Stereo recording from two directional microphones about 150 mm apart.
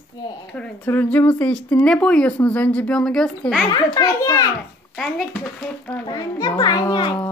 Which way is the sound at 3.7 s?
25° left (ahead or behind).